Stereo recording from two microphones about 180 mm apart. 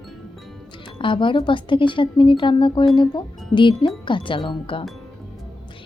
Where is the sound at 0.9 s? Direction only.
30° left (ahead or behind).